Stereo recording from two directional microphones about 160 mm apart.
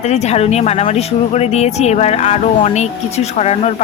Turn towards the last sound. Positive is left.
turn(degrees=40)  # may be behind; listen again after turning